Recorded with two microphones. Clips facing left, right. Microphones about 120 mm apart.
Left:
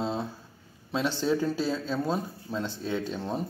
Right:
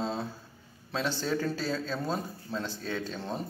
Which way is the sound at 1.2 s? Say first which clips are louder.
Left 4 dB; 15° left (ahead or behind).